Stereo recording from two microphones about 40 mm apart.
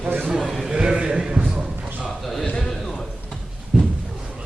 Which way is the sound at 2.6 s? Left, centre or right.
Centre.